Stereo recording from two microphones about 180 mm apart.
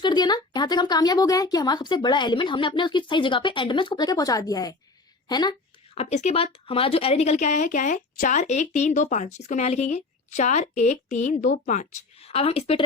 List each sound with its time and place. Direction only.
0.0 s speech: 25° left (ahead or behind)
5.3 s a sound: 25° left (ahead or behind)
6.0 s speech: 35° left (ahead or behind)